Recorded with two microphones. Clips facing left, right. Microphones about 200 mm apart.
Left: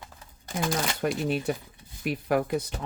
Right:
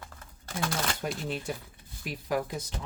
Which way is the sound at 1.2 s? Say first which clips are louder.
Left 7 dB; 60° left (ahead or behind).